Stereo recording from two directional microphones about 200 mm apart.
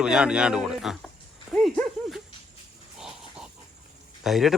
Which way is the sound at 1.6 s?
Centre (ahead or behind).